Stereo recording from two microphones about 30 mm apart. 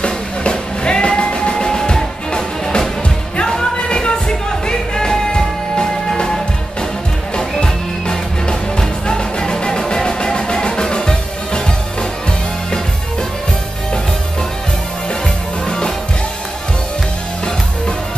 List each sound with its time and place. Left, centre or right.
0.0 s music: left
4.3 s music: left
15.6 s music: left